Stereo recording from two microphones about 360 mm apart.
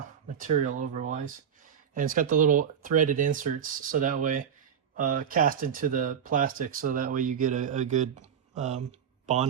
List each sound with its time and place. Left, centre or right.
0.3 s speech: right